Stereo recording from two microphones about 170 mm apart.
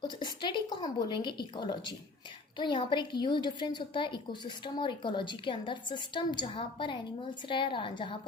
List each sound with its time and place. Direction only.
0.0 s a woman's voice: 25° left (ahead or behind)